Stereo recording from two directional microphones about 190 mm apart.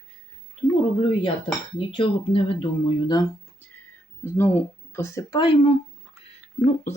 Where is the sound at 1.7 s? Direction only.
30° left (ahead or behind).